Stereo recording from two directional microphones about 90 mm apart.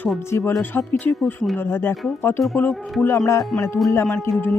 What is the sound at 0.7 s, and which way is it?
Speech, 25° left (ahead or behind).